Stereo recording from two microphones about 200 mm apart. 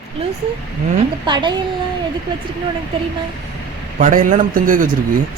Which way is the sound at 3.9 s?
40° right (ahead or behind).